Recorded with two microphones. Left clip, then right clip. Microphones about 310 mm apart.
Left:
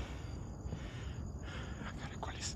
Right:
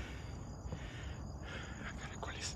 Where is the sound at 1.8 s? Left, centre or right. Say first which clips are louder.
Left 2 dB; centre.